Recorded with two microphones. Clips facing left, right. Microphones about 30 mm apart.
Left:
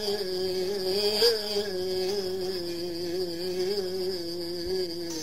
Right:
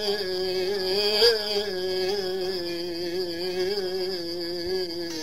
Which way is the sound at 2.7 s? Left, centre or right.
Right.